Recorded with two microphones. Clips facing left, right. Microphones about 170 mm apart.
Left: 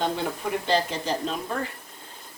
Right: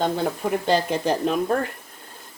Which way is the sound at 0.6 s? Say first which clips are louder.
Right 4 dB; 55° right (ahead or behind).